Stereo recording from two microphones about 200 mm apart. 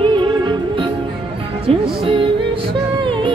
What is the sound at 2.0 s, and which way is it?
Music, 25° right (ahead or behind).